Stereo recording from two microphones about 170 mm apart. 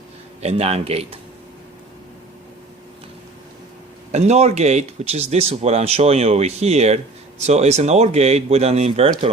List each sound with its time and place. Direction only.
0.4 s speech: 40° right (ahead or behind)
4.1 s speech: 40° right (ahead or behind)